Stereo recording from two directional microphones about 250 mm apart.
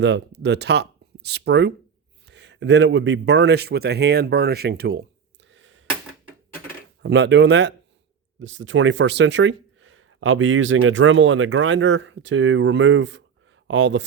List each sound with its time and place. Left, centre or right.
0.0 s speech: right
5.4 s a sound: right
7.0 s speech: right